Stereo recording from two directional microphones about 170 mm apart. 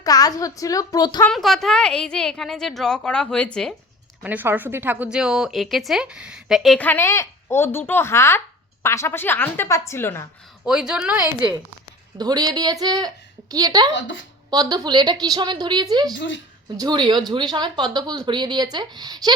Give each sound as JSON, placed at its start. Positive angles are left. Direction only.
{"t": 0.0, "sound": "a child's voice", "side_deg": 20}
{"t": 1.3, "sound": "a woman's voice", "side_deg": 0}
{"t": 4.2, "sound": "a woman's voice", "side_deg": -10}
{"t": 10.7, "sound": "a woman's voice", "side_deg": -5}
{"t": 11.3, "sound": "speech", "side_deg": -25}
{"t": 16.1, "sound": "a woman's voice", "side_deg": 90}
{"t": 16.7, "sound": "speech", "side_deg": -25}